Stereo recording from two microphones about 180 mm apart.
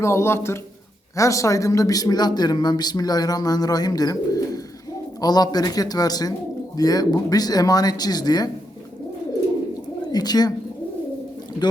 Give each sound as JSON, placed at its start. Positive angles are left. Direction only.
{"t": 0.0, "sound": "speech", "side_deg": 15}
{"t": 10.1, "sound": "speech", "side_deg": 20}